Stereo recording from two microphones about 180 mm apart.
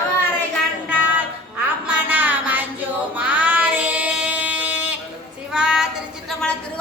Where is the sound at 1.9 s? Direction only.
10° right (ahead or behind).